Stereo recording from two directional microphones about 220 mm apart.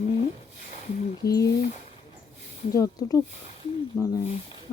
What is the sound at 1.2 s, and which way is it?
Speech, 15° left (ahead or behind).